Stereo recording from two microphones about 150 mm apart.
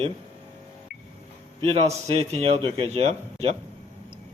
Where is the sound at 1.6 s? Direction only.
40° right (ahead or behind).